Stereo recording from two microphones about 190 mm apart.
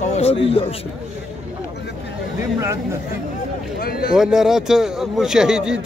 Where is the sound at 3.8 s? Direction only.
55° left (ahead or behind).